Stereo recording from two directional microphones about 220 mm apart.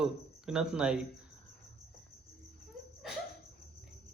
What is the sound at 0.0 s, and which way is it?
Speech, 5° right (ahead or behind).